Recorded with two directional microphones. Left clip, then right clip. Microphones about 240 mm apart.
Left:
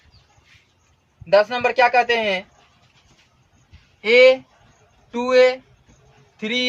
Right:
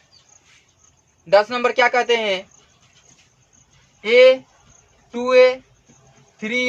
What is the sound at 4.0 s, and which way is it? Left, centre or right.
A man's voice, centre.